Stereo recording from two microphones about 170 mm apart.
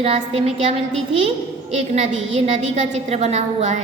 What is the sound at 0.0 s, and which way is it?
A woman's voice, 35° right (ahead or behind).